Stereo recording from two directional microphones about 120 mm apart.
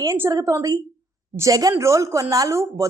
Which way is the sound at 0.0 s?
25° right (ahead or behind).